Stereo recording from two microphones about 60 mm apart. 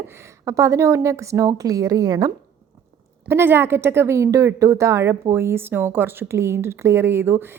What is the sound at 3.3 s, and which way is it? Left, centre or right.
Speech, right.